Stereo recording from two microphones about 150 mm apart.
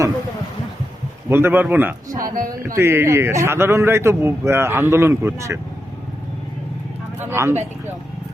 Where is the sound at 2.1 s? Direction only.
65° right (ahead or behind).